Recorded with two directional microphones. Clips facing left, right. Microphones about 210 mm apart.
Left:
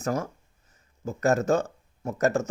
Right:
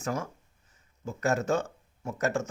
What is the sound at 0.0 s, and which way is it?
Speech, 40° left (ahead or behind).